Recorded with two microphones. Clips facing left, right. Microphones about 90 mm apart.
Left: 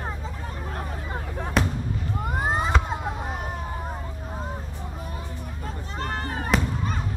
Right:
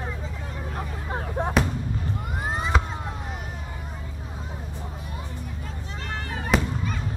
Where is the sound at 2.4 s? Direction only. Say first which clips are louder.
Left 3 dB; 40° left (ahead or behind).